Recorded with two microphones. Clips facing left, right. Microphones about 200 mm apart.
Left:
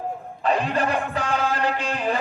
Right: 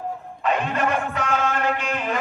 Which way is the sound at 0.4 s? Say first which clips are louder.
Left 1 dB; 35° left (ahead or behind).